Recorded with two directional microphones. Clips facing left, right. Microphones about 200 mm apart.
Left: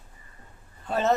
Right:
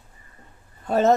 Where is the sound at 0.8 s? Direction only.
45° right (ahead or behind).